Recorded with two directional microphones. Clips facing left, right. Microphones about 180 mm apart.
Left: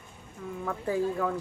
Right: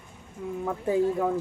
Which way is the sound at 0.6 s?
20° right (ahead or behind).